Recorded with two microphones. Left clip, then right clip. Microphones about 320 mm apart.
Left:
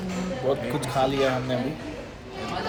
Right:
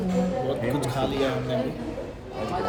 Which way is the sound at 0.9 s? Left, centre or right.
Centre.